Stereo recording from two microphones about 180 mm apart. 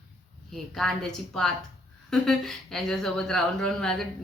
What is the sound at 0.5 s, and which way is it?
Speech, centre (ahead or behind).